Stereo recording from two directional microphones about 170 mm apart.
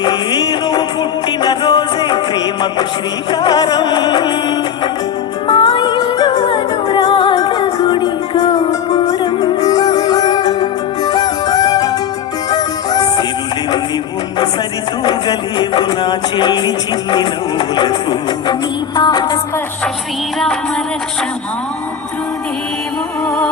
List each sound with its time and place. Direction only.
0.0 s music: 25° left (ahead or behind)
15.0 s music: 25° left (ahead or behind)
23.2 s music: 5° left (ahead or behind)